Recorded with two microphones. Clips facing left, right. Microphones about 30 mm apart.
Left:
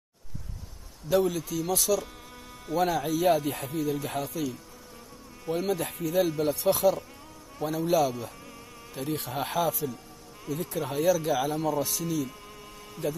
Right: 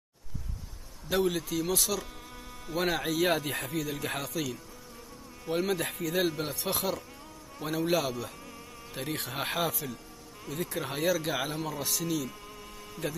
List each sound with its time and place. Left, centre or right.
1.2 s a man's voice: right
5.7 s a man's voice: right
8.9 s a man's voice: right
11.8 s speech: right